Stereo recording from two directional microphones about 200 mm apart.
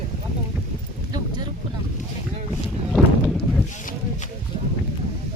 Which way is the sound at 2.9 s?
Centre (ahead or behind).